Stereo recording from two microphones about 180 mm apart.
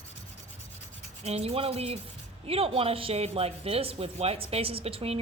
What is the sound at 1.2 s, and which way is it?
A woman's voice, 35° right (ahead or behind).